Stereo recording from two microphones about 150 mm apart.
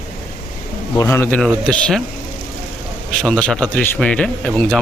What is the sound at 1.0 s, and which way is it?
Speech, 20° left (ahead or behind).